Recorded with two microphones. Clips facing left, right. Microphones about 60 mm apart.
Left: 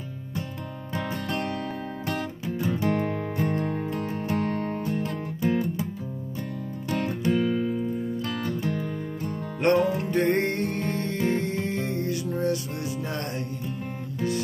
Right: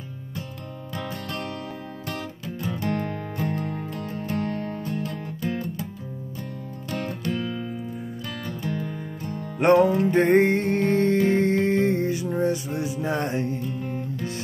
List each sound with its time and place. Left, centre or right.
2.4 s music: centre
3.7 s music: centre
4.6 s music: left
4.9 s music: centre
6.9 s music: left
9.6 s music: centre